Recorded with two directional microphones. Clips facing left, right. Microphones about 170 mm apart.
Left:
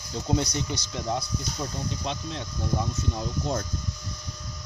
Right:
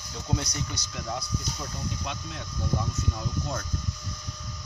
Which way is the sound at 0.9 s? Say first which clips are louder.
Left 4 dB; 25° left (ahead or behind).